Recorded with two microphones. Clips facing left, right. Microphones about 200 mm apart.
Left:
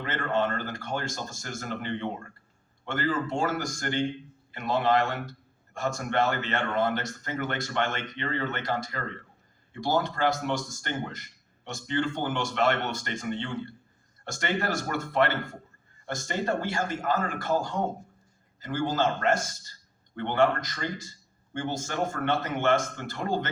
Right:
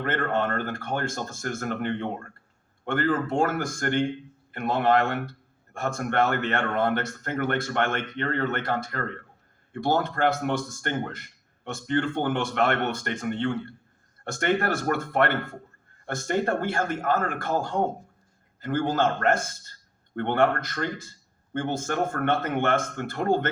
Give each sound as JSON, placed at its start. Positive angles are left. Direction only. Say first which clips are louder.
{"t": 0.0, "sound": "speech", "louder": "right 2 dB", "side_deg": -55}